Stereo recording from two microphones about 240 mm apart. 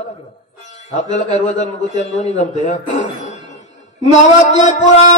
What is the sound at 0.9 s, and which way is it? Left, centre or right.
A man's voice, left.